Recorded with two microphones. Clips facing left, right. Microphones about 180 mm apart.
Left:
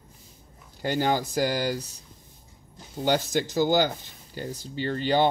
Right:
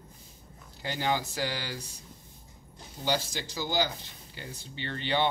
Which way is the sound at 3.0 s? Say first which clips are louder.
Left 7 dB; 55° left (ahead or behind).